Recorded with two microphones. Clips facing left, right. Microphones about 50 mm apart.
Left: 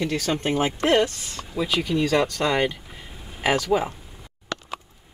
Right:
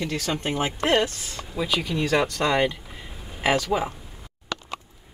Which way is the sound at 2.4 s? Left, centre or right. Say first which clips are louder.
Even; centre.